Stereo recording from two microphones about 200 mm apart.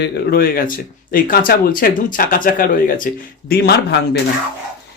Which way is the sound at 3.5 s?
55° left (ahead or behind).